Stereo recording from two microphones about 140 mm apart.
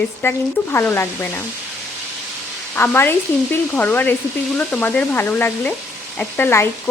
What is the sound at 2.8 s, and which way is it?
Frying, 15° left (ahead or behind).